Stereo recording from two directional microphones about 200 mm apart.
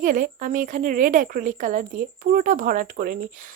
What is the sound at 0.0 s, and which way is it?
A woman's voice, 40° right (ahead or behind).